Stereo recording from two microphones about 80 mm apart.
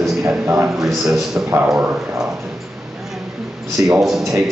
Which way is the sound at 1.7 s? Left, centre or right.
Right.